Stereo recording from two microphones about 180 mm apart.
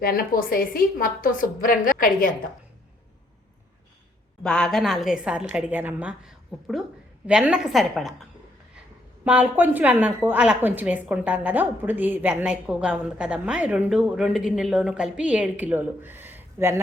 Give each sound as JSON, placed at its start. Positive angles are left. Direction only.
{"t": 0.0, "sound": "a woman's voice", "side_deg": 55}
{"t": 4.4, "sound": "a woman's voice", "side_deg": 5}